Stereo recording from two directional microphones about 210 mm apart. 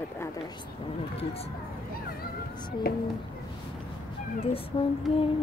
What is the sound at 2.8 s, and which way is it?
Speech, 45° left (ahead or behind).